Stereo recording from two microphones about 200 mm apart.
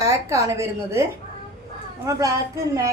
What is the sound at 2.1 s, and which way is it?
Speech, 15° right (ahead or behind).